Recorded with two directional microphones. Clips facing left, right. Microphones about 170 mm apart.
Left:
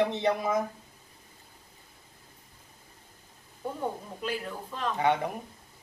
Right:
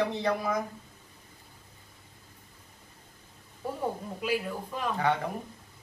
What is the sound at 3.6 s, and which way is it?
Speech, 5° right (ahead or behind).